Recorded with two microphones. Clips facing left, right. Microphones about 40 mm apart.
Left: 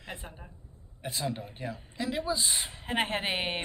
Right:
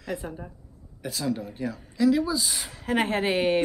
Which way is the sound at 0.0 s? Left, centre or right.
Left.